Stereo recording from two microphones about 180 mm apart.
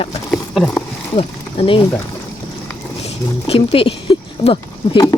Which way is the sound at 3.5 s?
35° left (ahead or behind).